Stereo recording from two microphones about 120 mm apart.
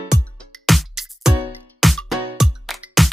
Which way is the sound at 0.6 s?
Centre (ahead or behind).